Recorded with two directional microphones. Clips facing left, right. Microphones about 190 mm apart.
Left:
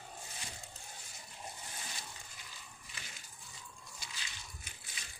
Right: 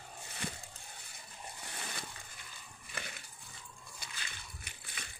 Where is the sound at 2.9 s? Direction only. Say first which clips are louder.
Right 11 dB; 60° right (ahead or behind).